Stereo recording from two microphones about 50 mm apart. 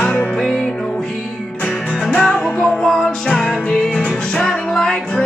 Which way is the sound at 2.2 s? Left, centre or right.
Centre.